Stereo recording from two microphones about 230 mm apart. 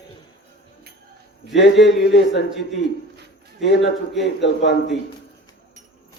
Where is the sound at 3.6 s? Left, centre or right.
Left.